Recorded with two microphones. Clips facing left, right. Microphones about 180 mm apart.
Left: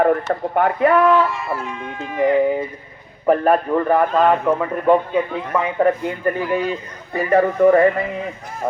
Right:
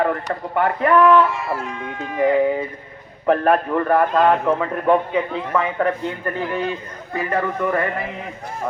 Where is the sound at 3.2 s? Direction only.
15° left (ahead or behind).